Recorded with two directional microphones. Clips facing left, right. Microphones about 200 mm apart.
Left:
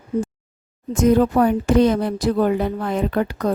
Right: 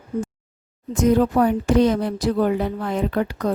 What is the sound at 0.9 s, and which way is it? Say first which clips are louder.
A woman's voice: left 2 dB; 55° left (ahead or behind).